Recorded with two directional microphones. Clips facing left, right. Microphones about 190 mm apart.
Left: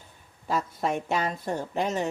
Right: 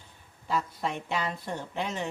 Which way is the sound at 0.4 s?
45° left (ahead or behind).